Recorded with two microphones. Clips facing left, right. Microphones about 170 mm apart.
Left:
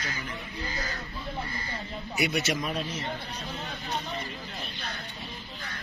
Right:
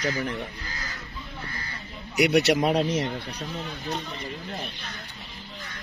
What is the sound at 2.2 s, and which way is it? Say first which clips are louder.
Speech: right 8 dB; 70° right (ahead or behind).